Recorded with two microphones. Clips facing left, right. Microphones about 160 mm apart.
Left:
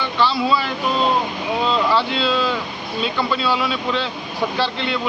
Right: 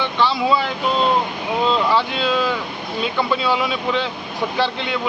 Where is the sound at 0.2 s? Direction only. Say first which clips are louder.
Even; 15° right (ahead or behind).